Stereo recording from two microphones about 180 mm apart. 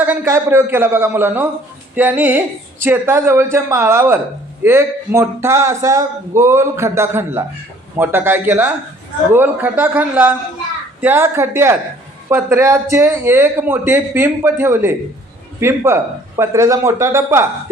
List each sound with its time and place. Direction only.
0.0 s a man's voice: 10° right (ahead or behind)